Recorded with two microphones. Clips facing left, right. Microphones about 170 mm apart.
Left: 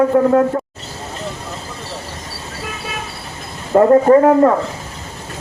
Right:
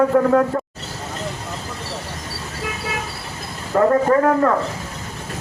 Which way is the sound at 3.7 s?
25° left (ahead or behind).